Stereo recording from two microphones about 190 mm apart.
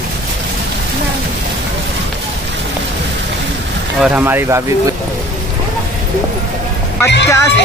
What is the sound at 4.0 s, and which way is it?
Speech, 10° right (ahead or behind).